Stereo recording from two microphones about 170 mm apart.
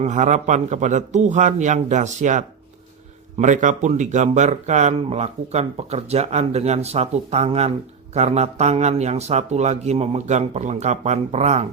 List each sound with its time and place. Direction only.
0.0 s a man's voice: 45° right (ahead or behind)